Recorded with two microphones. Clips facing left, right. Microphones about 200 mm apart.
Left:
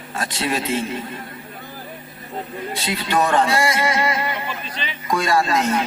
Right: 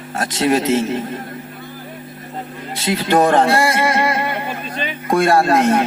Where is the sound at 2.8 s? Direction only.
50° right (ahead or behind).